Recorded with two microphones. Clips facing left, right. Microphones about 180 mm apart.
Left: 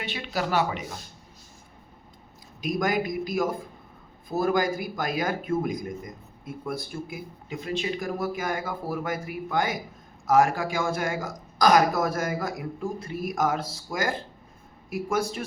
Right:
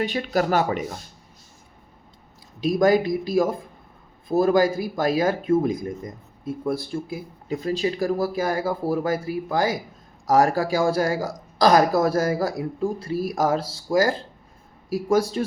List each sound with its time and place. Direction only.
0.0 s speech: 45° right (ahead or behind)
2.6 s speech: 30° right (ahead or behind)
7.4 s speech: 40° right (ahead or behind)